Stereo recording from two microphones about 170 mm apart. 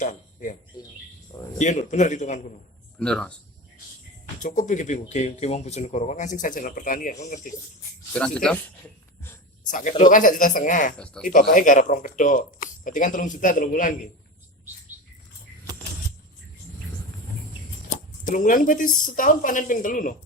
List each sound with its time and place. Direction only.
0.0 s a sound: 45° left (ahead or behind)
0.7 s a sound: 20° left (ahead or behind)
1.5 s speech: 45° left (ahead or behind)
3.0 s speech: 5° left (ahead or behind)
4.4 s speech: 50° left (ahead or behind)
8.2 s speech: 5° left (ahead or behind)
9.6 s speech: 50° left (ahead or behind)
10.9 s speech: 5° left (ahead or behind)
11.3 s speech: 55° left (ahead or behind)
18.3 s speech: 50° left (ahead or behind)